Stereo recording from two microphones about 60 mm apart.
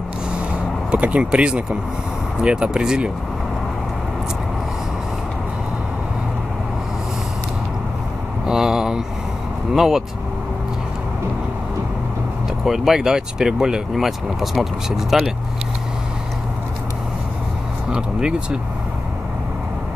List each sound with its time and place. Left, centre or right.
0.9 s speech: right
8.5 s a sound: centre
9.8 s speech: centre
12.6 s speech: centre
17.9 s speech: centre